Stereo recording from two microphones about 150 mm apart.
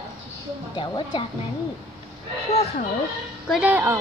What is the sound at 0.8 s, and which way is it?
Speech, 30° left (ahead or behind).